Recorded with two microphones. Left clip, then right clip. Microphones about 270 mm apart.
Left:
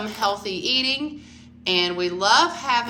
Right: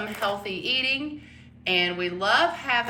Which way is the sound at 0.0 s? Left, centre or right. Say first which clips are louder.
Left 4 dB; centre.